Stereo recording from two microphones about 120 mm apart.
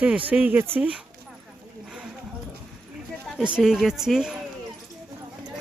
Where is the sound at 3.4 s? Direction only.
5° right (ahead or behind).